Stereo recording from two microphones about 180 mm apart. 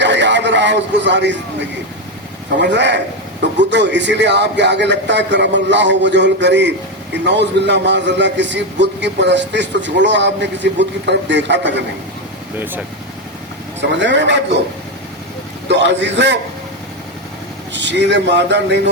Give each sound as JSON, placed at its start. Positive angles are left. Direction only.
{"t": 0.0, "sound": "a man's voice", "side_deg": -80}
{"t": 2.7, "sound": "a man's voice", "side_deg": -75}
{"t": 12.5, "sound": "speech", "side_deg": -10}
{"t": 14.0, "sound": "a man's voice", "side_deg": -85}
{"t": 15.7, "sound": "a man's voice", "side_deg": -80}
{"t": 17.7, "sound": "a man's voice", "side_deg": -80}